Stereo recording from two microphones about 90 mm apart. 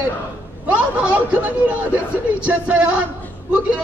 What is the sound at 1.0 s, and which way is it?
A man's voice, 15° right (ahead or behind).